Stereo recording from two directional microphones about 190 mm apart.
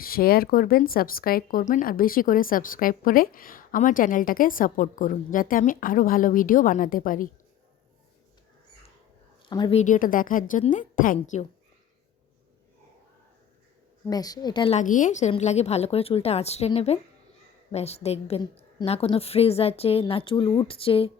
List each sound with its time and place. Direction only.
0.0 s speech: 50° left (ahead or behind)
9.5 s a woman's voice: 25° left (ahead or behind)
9.7 s speech: 40° left (ahead or behind)
14.1 s a woman's voice: 20° left (ahead or behind)
14.8 s a woman's voice: 45° left (ahead or behind)